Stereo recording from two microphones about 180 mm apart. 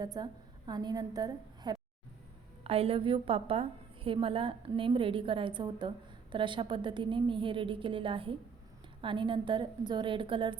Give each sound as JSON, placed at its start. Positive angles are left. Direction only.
{"t": 0.0, "sound": "a woman's voice", "side_deg": -25}